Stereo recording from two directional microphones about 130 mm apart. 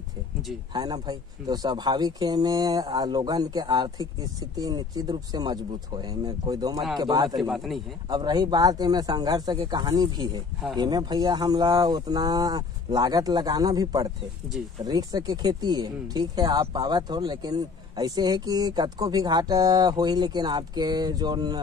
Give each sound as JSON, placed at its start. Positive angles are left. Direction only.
{"t": 0.7, "sound": "speech", "side_deg": -30}
{"t": 7.3, "sound": "a man's voice", "side_deg": 0}
{"t": 8.1, "sound": "speech", "side_deg": -30}